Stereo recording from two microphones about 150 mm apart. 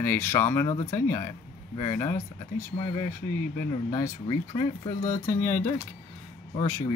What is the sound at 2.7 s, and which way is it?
Speech, 35° left (ahead or behind).